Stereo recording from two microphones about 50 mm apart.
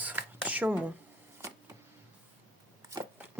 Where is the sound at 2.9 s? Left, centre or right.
Right.